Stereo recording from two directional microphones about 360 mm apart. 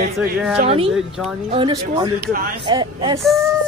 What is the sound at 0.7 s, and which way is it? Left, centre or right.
Speech, centre.